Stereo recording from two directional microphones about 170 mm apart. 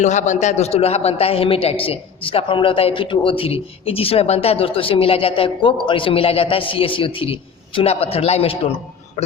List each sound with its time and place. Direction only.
0.0 s a man's voice: 45° left (ahead or behind)